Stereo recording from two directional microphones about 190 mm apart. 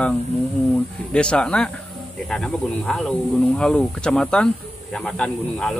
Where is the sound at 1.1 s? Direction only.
5° left (ahead or behind).